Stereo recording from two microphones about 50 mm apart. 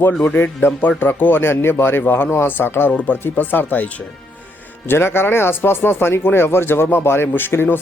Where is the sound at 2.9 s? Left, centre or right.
Left.